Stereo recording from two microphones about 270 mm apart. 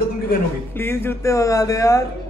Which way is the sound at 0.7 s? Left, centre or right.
Centre.